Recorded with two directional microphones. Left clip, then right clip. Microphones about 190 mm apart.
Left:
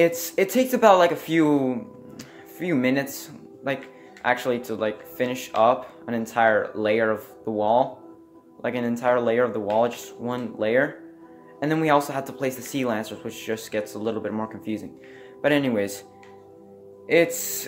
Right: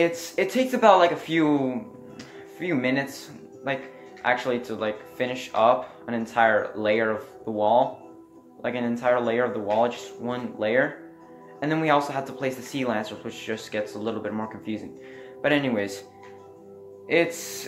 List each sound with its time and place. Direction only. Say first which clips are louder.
0.0 s speech: left 3 dB; 45° left (ahead or behind)
17.1 s speech: left 3 dB; 45° left (ahead or behind)